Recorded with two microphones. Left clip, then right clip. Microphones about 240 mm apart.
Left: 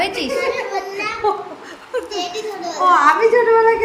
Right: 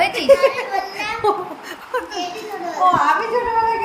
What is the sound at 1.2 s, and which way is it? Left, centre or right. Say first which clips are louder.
Speech: right 1 dB; right.